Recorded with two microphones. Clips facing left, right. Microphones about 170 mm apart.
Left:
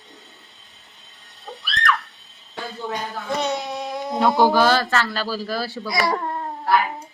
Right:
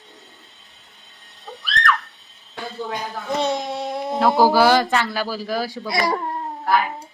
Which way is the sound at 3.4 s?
30° right (ahead or behind).